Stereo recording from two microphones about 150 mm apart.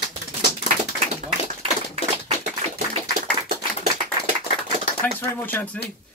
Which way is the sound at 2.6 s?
45° right (ahead or behind).